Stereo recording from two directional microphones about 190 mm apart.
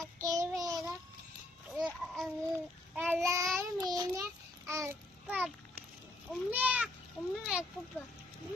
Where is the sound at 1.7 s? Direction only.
Centre (ahead or behind).